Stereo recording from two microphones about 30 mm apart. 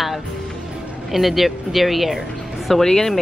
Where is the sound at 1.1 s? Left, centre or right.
Centre.